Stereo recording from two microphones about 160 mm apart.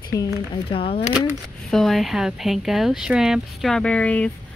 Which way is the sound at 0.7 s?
35° left (ahead or behind).